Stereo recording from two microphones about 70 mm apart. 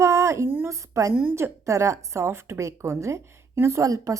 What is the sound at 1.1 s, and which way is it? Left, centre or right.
Speech, right.